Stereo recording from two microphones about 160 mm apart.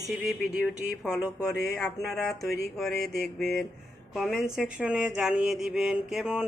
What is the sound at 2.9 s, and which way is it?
Mantra, 85° left.